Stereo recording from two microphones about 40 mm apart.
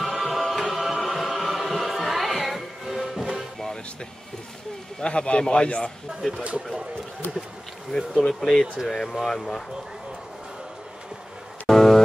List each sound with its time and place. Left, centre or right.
0.0 s music: centre
5.0 s a man's voice: left
6.2 s speech: centre
8.1 s speech: centre
11.6 s a sound: centre